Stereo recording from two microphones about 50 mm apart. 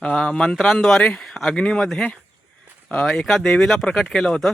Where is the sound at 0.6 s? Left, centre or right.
Centre.